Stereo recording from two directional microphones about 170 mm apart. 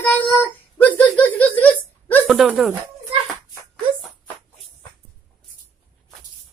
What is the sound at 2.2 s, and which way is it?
Speech, 5° right (ahead or behind).